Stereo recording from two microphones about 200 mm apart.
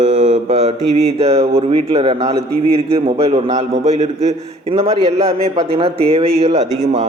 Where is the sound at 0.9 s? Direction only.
30° right (ahead or behind).